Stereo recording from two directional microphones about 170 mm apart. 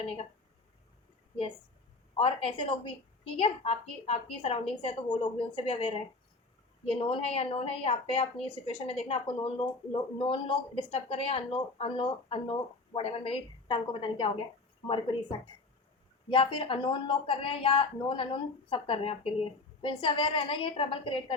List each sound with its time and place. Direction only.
0.0 s a woman's voice: 35° left (ahead or behind)
2.1 s a woman's voice: 35° left (ahead or behind)